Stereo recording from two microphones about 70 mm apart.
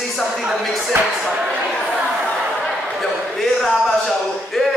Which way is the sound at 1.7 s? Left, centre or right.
Centre.